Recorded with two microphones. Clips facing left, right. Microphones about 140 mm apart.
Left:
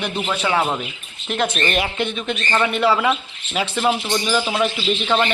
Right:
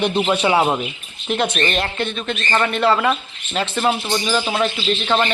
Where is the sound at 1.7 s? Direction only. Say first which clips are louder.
Left 1 dB; 10° left (ahead or behind).